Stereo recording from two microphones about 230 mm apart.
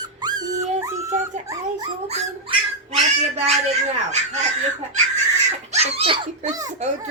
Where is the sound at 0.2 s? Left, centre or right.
Centre.